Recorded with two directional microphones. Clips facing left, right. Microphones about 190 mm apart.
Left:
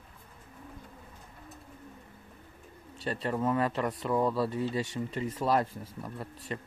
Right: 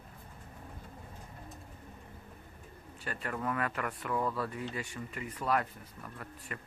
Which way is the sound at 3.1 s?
25° left (ahead or behind).